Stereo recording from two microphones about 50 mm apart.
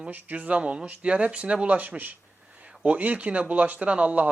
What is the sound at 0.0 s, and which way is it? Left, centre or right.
Speech, right.